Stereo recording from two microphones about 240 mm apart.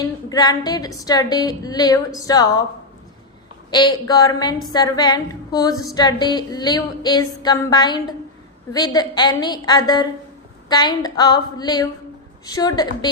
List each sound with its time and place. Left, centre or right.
0.0 s a woman's voice: centre
3.7 s a woman's voice: centre